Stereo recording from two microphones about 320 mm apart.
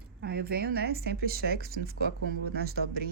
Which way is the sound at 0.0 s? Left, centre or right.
Right.